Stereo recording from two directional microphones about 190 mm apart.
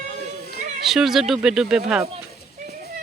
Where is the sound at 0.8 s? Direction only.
Centre (ahead or behind).